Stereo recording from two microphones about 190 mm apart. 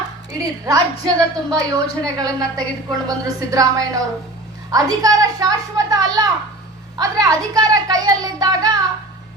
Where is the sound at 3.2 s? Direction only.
20° right (ahead or behind).